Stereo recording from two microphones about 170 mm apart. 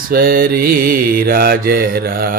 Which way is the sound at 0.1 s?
60° right (ahead or behind).